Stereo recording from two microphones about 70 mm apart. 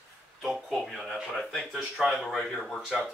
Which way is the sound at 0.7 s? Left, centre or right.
Centre.